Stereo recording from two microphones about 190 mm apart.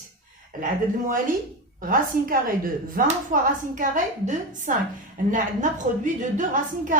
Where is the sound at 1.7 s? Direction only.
45° right (ahead or behind).